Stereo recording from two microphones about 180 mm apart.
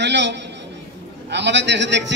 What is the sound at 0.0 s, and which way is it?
A man's voice, 75° right (ahead or behind).